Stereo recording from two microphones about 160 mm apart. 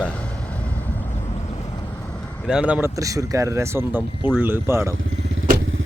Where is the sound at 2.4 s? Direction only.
5° right (ahead or behind).